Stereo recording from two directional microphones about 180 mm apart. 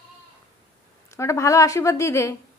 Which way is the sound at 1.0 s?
15° left (ahead or behind).